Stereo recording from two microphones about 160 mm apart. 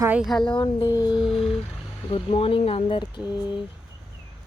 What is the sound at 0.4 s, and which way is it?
Speech, 30° left (ahead or behind).